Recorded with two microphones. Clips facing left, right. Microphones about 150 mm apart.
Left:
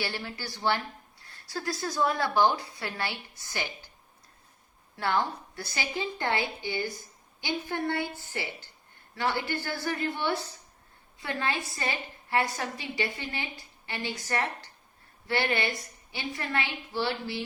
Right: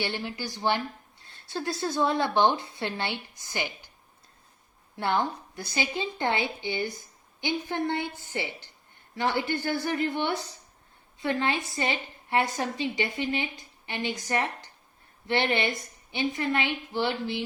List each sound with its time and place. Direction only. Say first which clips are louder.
0.0 s a woman's voice: right 3 dB; 20° right (ahead or behind)
4.9 s a woman's voice: right 1 dB; 20° right (ahead or behind)